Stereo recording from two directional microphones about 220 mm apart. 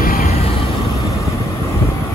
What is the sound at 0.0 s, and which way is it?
Vehicle, 40° left (ahead or behind).